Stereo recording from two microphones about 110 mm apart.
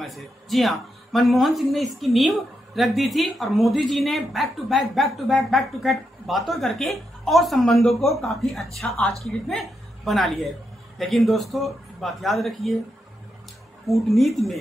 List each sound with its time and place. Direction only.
0.0 s speech: centre (ahead or behind)
13.8 s speech: centre (ahead or behind)